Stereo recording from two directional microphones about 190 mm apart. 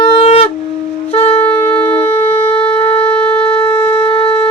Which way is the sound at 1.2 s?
30° left (ahead or behind).